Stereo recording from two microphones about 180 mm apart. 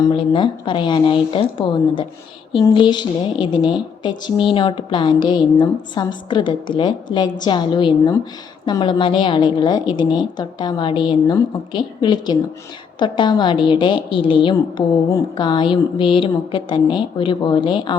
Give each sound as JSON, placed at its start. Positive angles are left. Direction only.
{"t": 0.0, "sound": "a woman's voice", "side_deg": 25}